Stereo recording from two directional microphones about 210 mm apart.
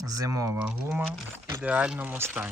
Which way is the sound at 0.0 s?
15° right (ahead or behind).